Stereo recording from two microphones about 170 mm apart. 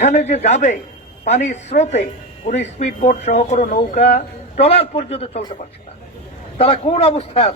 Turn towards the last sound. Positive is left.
turn(degrees=35)  # may be behind; listen again after turning